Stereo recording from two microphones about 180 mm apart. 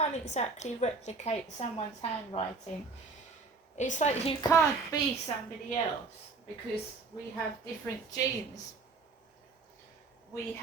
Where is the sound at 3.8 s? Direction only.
40° left (ahead or behind).